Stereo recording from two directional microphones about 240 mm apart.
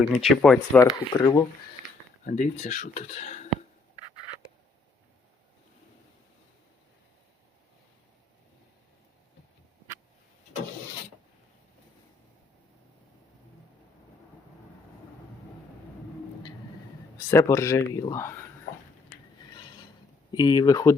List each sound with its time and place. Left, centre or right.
0.2 s speech: centre
0.8 s speech: centre
2.2 s speech: left
17.3 s speech: centre
19.5 s a sound: centre
20.3 s speech: centre